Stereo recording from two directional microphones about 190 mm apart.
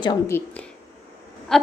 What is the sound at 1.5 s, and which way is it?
Speech, 5° left (ahead or behind).